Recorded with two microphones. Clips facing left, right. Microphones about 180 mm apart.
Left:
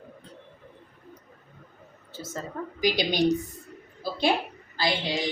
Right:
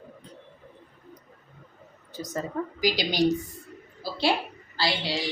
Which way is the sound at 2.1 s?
15° right (ahead or behind).